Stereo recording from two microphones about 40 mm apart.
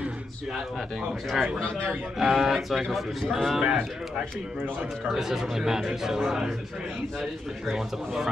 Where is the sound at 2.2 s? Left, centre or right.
Centre.